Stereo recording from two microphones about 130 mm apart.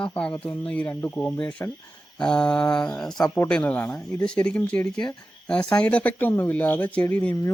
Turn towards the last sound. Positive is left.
turn(degrees=10)  # may be behind; listen again after turning